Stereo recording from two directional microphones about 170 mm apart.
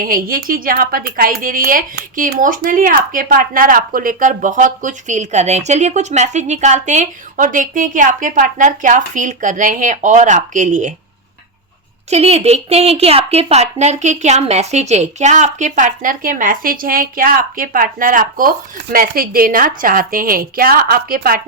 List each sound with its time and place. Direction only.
0.0 s a woman's voice: 55° right (ahead or behind)
12.1 s a woman's voice: 40° right (ahead or behind); by 21.4 s 60° right (ahead or behind)